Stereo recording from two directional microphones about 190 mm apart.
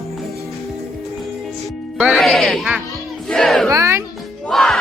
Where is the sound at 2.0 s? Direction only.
Centre (ahead or behind).